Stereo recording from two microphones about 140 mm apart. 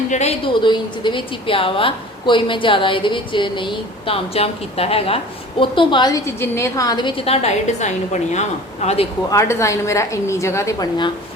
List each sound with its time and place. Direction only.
0.1 s a woman's voice: 50° left (ahead or behind)
0.4 s a woman's voice: 35° left (ahead or behind); by 9.0 s 50° left (ahead or behind)
9.3 s a woman's voice: 20° left (ahead or behind)